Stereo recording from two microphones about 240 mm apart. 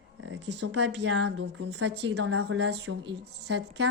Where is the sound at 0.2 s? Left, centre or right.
Right.